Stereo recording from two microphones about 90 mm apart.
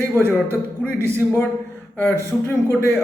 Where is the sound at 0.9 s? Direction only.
25° right (ahead or behind).